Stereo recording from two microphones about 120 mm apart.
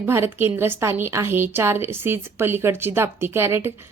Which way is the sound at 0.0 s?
20° right (ahead or behind).